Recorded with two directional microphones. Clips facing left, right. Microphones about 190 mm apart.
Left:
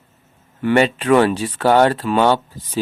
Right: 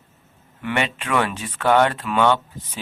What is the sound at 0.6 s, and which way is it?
Speech, 40° left (ahead or behind).